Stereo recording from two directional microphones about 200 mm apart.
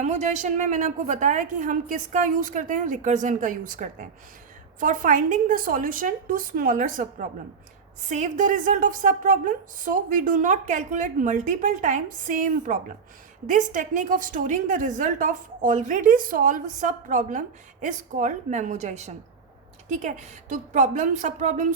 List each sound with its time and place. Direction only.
0.0 s a woman's voice: 35° right (ahead or behind)